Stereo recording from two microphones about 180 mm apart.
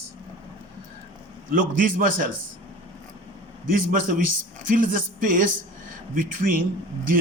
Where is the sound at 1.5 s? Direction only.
50° right (ahead or behind).